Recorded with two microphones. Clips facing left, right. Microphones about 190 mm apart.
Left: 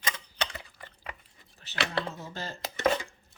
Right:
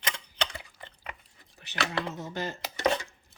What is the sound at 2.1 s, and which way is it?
Speech, 20° right (ahead or behind).